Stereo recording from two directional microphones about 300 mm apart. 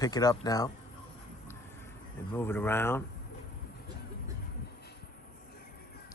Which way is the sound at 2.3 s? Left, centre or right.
Centre.